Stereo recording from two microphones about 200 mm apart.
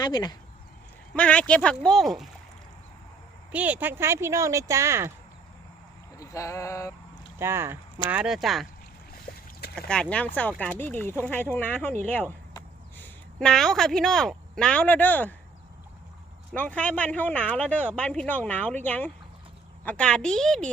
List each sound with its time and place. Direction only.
0.0 s speech: 20° left (ahead or behind)
1.1 s speech: 5° left (ahead or behind)
3.5 s speech: 5° right (ahead or behind)
6.1 s a sound: 15° left (ahead or behind)
7.3 s speech: 10° right (ahead or behind)
9.3 s boat: 50° left (ahead or behind)
9.7 s speech: 5° left (ahead or behind)
13.4 s speech: centre (ahead or behind)
16.6 s speech: 5° left (ahead or behind)